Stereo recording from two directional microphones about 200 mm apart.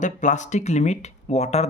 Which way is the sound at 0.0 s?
40° left (ahead or behind).